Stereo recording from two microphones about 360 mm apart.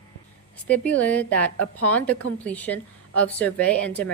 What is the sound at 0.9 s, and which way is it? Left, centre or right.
A woman's voice, centre.